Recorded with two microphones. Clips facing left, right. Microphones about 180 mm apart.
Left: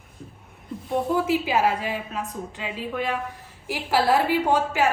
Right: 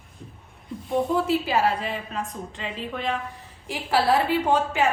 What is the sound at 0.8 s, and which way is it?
A woman's voice, 5° left (ahead or behind).